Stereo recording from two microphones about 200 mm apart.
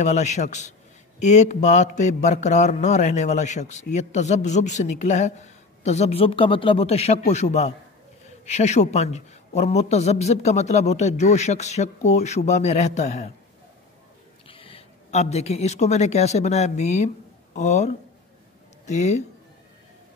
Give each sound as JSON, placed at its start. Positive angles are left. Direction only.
{"t": 0.0, "sound": "a man's voice", "side_deg": 35}
{"t": 14.5, "sound": "a man's voice", "side_deg": 25}